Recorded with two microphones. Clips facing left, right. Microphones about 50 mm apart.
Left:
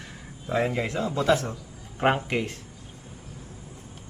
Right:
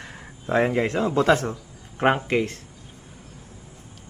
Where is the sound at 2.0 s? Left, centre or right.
Right.